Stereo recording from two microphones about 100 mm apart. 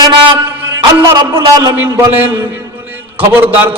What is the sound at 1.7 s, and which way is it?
Mantra, 20° right (ahead or behind).